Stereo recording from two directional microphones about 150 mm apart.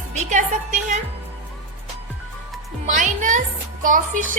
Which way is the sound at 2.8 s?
60° right (ahead or behind).